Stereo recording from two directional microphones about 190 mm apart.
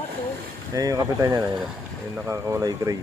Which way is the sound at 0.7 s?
20° right (ahead or behind).